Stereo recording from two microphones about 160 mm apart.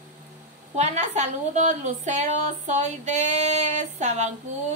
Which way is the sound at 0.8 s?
45° right (ahead or behind).